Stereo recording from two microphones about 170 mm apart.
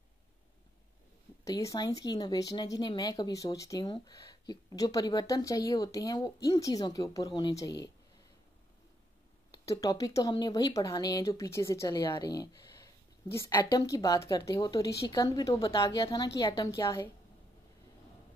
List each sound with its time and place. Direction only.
1.4 s speech: 20° left (ahead or behind)
9.5 s speech: 20° left (ahead or behind)